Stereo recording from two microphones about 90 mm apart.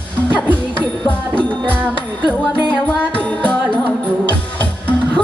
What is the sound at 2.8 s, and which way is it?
Music, 15° left (ahead or behind).